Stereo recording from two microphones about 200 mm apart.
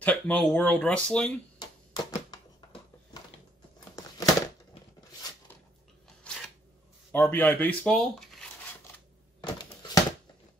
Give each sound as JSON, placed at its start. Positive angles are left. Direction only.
{"t": 0.0, "sound": "speech", "side_deg": 5}
{"t": 1.6, "sound": "typewriter", "side_deg": 20}
{"t": 3.9, "sound": "crumpling", "side_deg": 15}
{"t": 6.2, "sound": "a sound", "side_deg": 5}
{"t": 7.1, "sound": "speech", "side_deg": 10}